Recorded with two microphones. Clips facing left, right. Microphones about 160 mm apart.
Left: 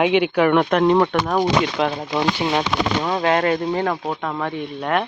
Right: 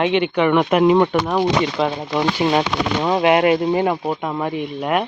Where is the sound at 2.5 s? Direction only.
20° right (ahead or behind).